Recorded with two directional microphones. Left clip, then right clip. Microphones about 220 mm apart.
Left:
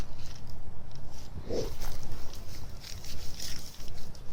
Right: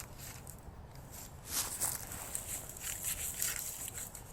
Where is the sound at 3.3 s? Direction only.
Centre (ahead or behind).